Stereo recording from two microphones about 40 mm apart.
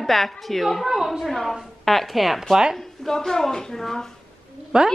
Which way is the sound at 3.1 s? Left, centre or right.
Centre.